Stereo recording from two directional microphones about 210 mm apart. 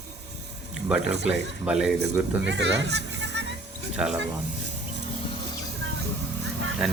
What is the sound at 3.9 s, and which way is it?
Speech, 5° right (ahead or behind).